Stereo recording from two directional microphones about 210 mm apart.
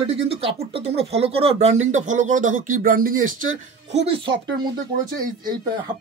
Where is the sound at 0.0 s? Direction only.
25° right (ahead or behind).